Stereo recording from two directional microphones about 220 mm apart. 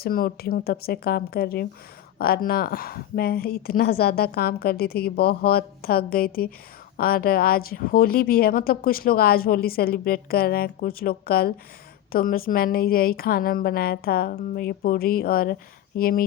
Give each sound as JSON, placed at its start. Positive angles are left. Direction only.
{"t": 0.0, "sound": "speech", "side_deg": 45}